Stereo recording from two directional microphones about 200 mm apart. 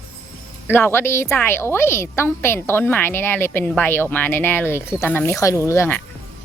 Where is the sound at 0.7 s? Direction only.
10° left (ahead or behind).